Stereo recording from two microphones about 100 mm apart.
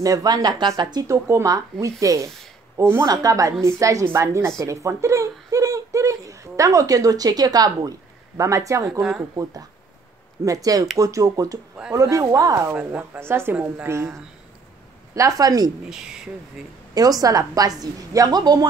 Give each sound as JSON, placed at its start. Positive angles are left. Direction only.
{"t": 0.0, "sound": "a woman's voice", "side_deg": -40}
{"t": 1.0, "sound": "a woman's voice", "side_deg": -30}
{"t": 3.1, "sound": "a woman's voice", "side_deg": -35}
{"t": 12.7, "sound": "speech", "side_deg": -15}
{"t": 13.2, "sound": "a woman's voice", "side_deg": -25}
{"t": 15.9, "sound": "speech", "side_deg": -5}
{"t": 16.9, "sound": "a woman's voice", "side_deg": -40}